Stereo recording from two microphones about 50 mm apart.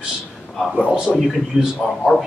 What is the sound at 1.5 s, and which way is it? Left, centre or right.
Speech, centre.